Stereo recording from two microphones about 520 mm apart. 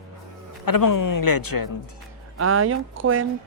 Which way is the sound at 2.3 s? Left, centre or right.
Right.